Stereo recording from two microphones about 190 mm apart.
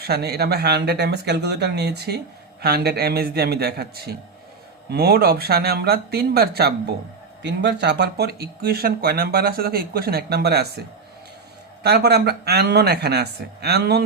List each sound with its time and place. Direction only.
0.0 s speech: 55° right (ahead or behind)
11.8 s speech: 60° right (ahead or behind)